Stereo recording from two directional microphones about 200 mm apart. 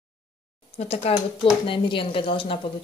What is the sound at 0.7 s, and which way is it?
Speech, 30° left (ahead or behind).